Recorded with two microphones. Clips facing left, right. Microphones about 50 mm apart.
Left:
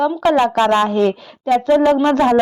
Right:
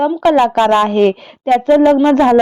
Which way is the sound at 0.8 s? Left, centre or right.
Right.